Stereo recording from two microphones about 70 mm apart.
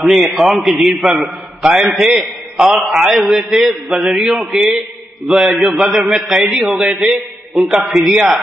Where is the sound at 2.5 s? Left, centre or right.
Centre.